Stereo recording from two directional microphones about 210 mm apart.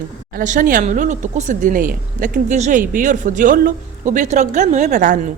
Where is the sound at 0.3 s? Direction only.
40° right (ahead or behind).